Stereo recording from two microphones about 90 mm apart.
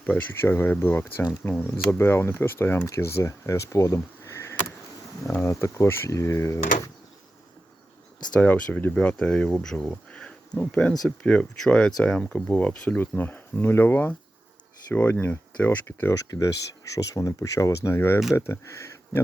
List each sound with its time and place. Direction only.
0.4 s speech: 25° left (ahead or behind)
8.3 s speech: 15° left (ahead or behind)
16.1 s speech: 35° left (ahead or behind)